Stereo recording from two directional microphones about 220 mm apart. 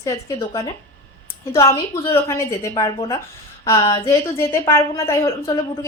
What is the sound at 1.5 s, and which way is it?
A woman's voice, 15° left (ahead or behind).